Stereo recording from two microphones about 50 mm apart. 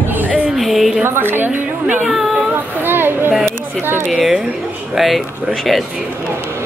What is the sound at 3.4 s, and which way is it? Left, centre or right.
Speech, right.